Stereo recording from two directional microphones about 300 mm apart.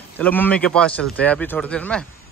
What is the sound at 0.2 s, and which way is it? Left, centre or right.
Speech, centre.